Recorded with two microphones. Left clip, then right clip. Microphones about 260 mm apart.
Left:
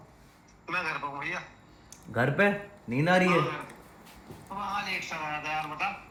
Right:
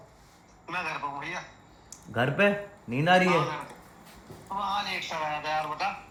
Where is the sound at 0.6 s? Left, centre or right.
Centre.